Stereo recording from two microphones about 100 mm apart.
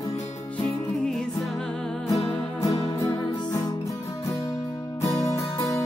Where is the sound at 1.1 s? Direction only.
Centre (ahead or behind).